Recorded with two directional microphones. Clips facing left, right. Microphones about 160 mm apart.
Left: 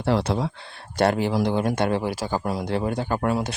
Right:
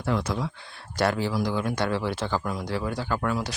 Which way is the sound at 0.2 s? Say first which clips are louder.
Left 4 dB; 30° left (ahead or behind).